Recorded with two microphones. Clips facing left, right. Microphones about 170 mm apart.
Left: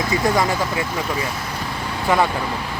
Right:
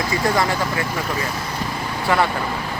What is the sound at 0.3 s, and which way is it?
Speech, 15° left (ahead or behind).